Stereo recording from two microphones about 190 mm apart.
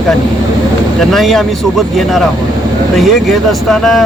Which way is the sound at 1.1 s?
Centre (ahead or behind).